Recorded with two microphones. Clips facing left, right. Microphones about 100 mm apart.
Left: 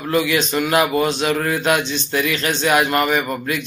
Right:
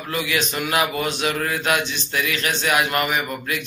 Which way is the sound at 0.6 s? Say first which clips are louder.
Left 7 dB; 30° left (ahead or behind).